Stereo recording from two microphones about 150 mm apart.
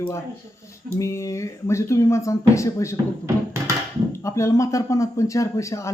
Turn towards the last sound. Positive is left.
turn(degrees=20)  # may be behind; listen again after turning